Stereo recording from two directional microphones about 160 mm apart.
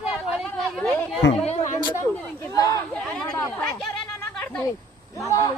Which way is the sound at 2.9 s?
5° left (ahead or behind).